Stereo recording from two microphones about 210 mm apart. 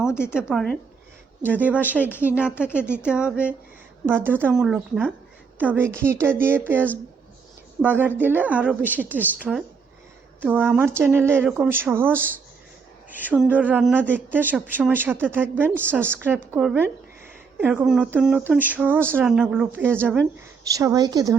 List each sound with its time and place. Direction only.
0.1 s speech: 10° left (ahead or behind)
0.3 s a woman's voice: centre (ahead or behind); by 21.3 s 20° right (ahead or behind)